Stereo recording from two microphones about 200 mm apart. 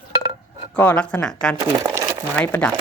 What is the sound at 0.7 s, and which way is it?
Speech, 10° left (ahead or behind).